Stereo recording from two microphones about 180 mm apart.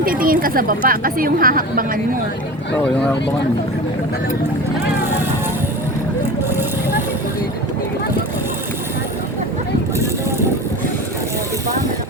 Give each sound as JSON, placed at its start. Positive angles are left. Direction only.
{"t": 0.0, "sound": "speech", "side_deg": -50}